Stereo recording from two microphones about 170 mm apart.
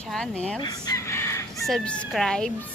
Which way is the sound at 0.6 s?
25° left (ahead or behind).